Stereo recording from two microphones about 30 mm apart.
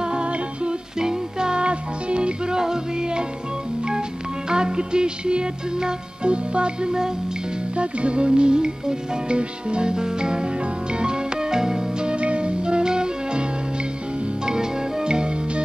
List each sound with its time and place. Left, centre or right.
0.0 s music: right
0.9 s music: right
2.5 s music: right
4.5 s music: right
7.7 s music: right
12.1 s music: right